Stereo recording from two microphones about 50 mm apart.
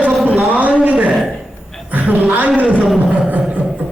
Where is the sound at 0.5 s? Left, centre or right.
Right.